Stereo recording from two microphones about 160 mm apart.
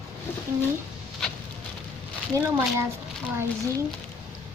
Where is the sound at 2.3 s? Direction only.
25° right (ahead or behind).